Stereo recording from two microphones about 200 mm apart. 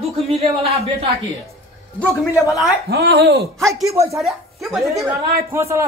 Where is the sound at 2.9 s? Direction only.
55° right (ahead or behind).